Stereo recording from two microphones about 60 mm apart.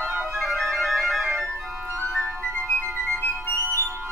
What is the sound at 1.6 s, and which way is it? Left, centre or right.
Flute, right.